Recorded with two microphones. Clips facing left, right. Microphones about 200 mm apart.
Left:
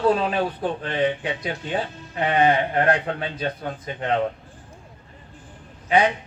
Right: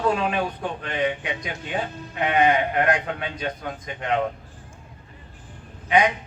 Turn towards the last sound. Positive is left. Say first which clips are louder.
# left 1 dB
turn(degrees=30)  # may be behind; listen again after turning